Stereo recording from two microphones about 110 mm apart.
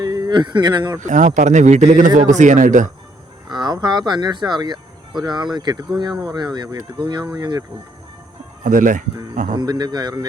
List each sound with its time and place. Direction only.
0.0 s speech: 40° right (ahead or behind)
1.0 s speech: 90° right
3.5 s speech: 40° right (ahead or behind)
9.1 s speech: 40° right (ahead or behind)